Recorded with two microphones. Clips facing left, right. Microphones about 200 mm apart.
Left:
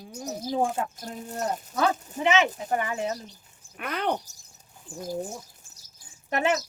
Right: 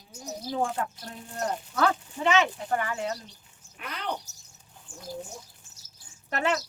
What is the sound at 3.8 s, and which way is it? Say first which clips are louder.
Speech: left 7 dB; 55° left (ahead or behind).